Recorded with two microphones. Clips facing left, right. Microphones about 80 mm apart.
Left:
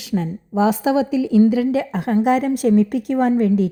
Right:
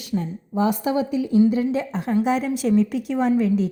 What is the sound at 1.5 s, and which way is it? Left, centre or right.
A woman's voice, left.